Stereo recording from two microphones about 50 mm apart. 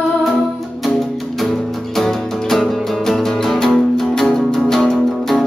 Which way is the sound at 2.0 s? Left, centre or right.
Centre.